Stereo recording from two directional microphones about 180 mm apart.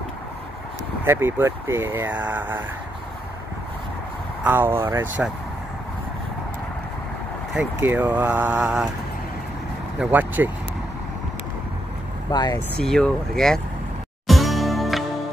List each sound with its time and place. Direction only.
1.0 s speech: 15° right (ahead or behind)
4.4 s speech: 10° right (ahead or behind)
7.5 s speech: 10° right (ahead or behind)
9.9 s speech: 10° right (ahead or behind)
12.3 s speech: 25° left (ahead or behind)
12.5 s speech: 5° left (ahead or behind)
14.2 s music: centre (ahead or behind)